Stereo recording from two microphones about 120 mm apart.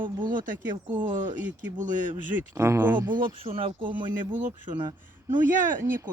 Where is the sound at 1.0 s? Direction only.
90° right.